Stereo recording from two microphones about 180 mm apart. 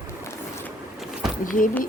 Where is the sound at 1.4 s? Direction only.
50° left (ahead or behind).